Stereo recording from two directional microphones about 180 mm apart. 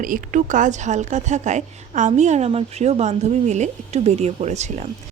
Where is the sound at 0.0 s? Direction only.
45° right (ahead or behind).